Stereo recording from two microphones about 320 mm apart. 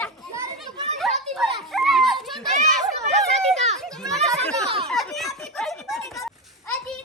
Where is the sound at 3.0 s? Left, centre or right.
Right.